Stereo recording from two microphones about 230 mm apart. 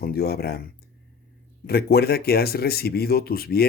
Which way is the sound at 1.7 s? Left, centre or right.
Left.